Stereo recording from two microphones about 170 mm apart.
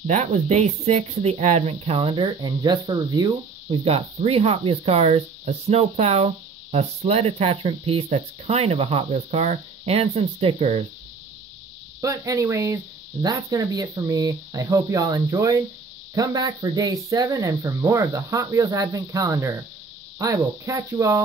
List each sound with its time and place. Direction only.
0.0 s speech: 45° right (ahead or behind); by 3.8 s 25° right (ahead or behind)
3.8 s speech: 35° right (ahead or behind)
12.0 s speech: 20° right (ahead or behind)